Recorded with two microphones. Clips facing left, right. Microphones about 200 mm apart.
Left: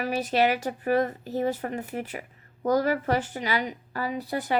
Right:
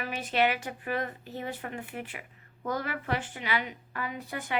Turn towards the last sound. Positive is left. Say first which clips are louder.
# left 7 dB
turn(degrees=35)  # may be behind; listen again after turning